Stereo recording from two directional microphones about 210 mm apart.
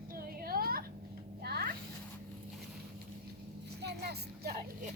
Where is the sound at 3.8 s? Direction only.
50° right (ahead or behind).